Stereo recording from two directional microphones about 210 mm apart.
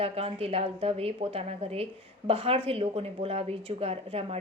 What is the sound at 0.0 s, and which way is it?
A woman's voice, 30° right (ahead or behind).